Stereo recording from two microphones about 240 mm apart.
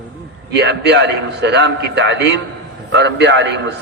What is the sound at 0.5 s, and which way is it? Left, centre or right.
A man's voice, right.